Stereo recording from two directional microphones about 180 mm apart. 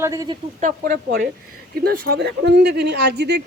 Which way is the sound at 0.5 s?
50° right (ahead or behind).